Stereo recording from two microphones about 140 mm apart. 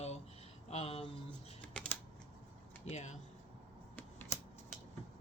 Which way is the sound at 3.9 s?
10° left (ahead or behind).